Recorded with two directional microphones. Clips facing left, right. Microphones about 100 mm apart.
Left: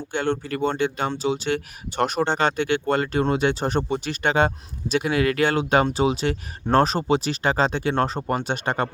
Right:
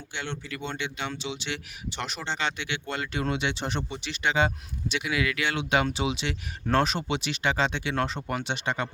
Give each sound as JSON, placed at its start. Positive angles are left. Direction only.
{"t": 0.1, "sound": "speech", "side_deg": 45}